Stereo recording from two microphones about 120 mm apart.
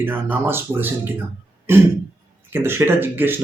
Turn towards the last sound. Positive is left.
turn(degrees=-15)  # may be behind; listen again after turning